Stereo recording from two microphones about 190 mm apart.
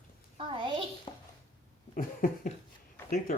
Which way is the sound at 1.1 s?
30° left (ahead or behind).